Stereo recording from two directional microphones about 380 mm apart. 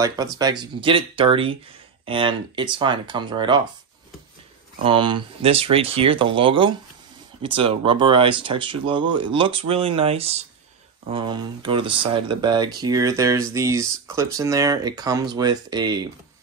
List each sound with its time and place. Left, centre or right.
0.0 s speech: centre
4.8 s speech: centre